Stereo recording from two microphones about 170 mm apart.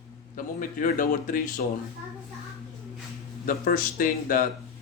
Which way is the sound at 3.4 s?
55° left (ahead or behind).